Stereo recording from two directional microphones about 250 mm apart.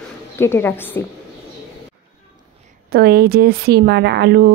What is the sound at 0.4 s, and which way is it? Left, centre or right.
Speech, centre.